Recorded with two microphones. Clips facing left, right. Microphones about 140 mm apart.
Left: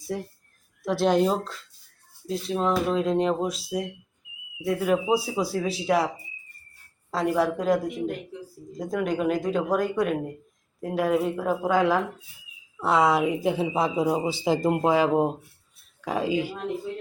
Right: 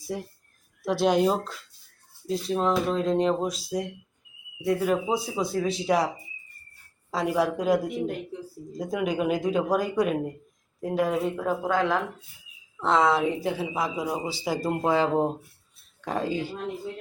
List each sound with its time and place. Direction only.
0.1 s speech: 5° right (ahead or behind)
7.1 s speech: centre (ahead or behind)